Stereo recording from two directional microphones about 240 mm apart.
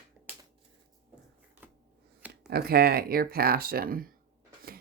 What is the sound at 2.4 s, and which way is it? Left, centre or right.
Speech, right.